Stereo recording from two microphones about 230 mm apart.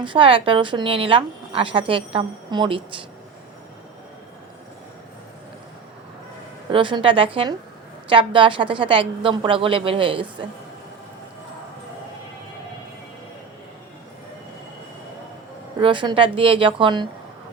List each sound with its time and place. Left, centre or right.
0.0 s a woman's voice: right
6.7 s a woman's voice: right
15.8 s a woman's voice: right